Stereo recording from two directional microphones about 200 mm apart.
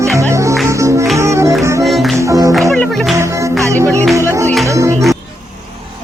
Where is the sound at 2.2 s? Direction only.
15° right (ahead or behind).